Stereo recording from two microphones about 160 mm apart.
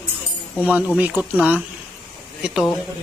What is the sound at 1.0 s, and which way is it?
Speech, 10° right (ahead or behind).